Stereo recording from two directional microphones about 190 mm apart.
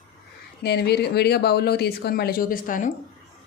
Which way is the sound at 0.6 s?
60° left (ahead or behind).